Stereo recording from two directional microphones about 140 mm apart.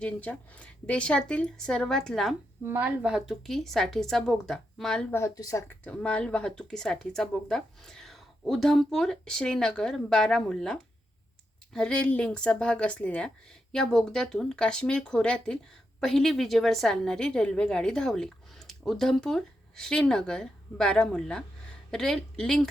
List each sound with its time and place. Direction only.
0.0 s speech: 10° left (ahead or behind)
2.6 s speech: 15° right (ahead or behind); by 5.0 s 5° left (ahead or behind)
5.1 s speech: 25° left (ahead or behind)
5.8 s speech: 10° left (ahead or behind)